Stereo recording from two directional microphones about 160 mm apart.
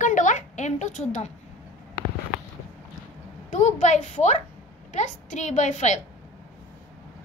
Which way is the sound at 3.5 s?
45° left (ahead or behind).